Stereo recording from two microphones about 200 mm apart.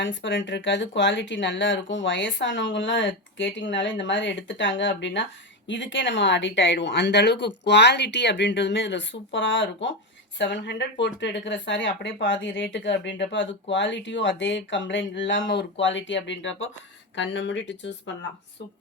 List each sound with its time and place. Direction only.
0.0 s speech: 65° left (ahead or behind)